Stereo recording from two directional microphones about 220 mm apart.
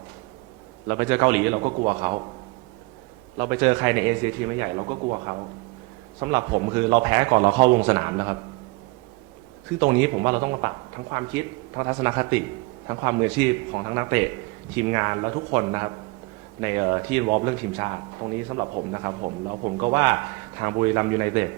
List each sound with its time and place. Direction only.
0.9 s speech: 20° right (ahead or behind)
1.6 s speech: 30° right (ahead or behind)
3.3 s speech: 20° right (ahead or behind)
7.6 s a man's voice: 40° right (ahead or behind)
7.9 s speech: 25° right (ahead or behind)
9.9 s speech: 20° right (ahead or behind)